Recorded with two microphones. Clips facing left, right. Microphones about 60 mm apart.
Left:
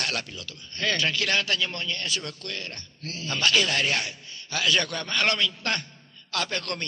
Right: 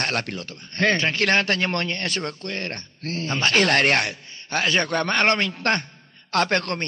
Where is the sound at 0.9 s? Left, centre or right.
Right.